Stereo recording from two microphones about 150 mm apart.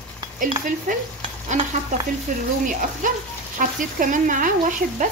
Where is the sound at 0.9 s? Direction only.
60° right (ahead or behind).